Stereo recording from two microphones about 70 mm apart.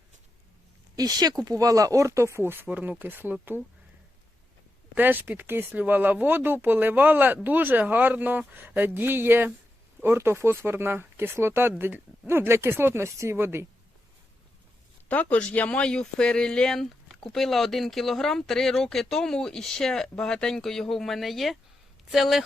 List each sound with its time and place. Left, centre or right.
0.9 s speech: right
2.6 s speech: right
4.9 s speech: right
11.8 s speech: right
15.1 s speech: left; by 22.4 s centre